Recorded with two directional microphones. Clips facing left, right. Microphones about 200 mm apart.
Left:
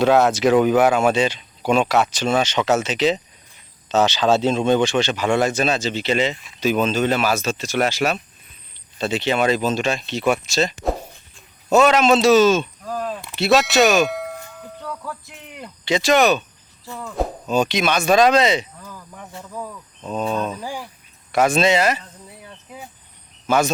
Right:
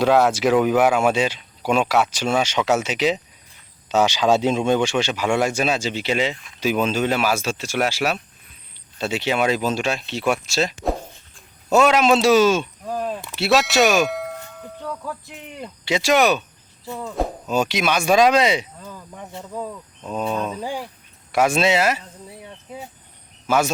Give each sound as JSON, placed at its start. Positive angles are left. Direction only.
{"t": 0.0, "sound": "speech", "side_deg": -10}
{"t": 13.2, "sound": "speech", "side_deg": 0}
{"t": 14.8, "sound": "music", "side_deg": -10}
{"t": 15.8, "sound": "speech", "side_deg": -10}
{"t": 16.8, "sound": "speech", "side_deg": -20}
{"t": 17.2, "sound": "speech", "side_deg": -5}
{"t": 18.8, "sound": "cricket", "side_deg": -20}
{"t": 20.1, "sound": "speech", "side_deg": -10}
{"t": 20.6, "sound": "speech", "side_deg": -20}
{"t": 21.3, "sound": "speech", "side_deg": -10}
{"t": 23.5, "sound": "speech", "side_deg": -10}